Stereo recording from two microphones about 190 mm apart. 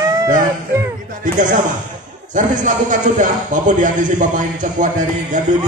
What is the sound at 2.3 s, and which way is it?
A man's voice, 40° right (ahead or behind).